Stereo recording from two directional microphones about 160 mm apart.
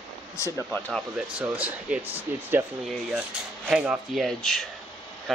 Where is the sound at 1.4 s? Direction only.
10° right (ahead or behind).